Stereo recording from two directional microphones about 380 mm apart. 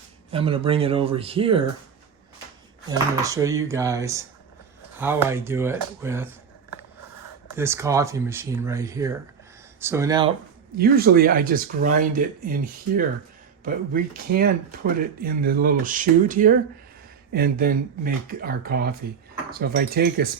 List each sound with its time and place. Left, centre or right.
0.3 s speech: centre
2.9 s speech: centre
7.5 s speech: centre
10.8 s speech: right
13.7 s speech: right